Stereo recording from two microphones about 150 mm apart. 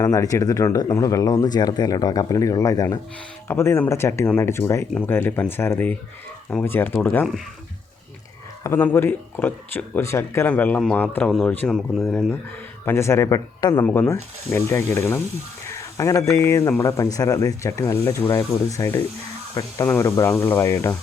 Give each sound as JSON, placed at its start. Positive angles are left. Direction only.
{"t": 0.0, "sound": "speech", "side_deg": 20}
{"t": 8.6, "sound": "speech", "side_deg": 15}
{"t": 12.8, "sound": "speech", "side_deg": 15}
{"t": 13.8, "sound": "speech", "side_deg": 10}
{"t": 19.9, "sound": "speech", "side_deg": 10}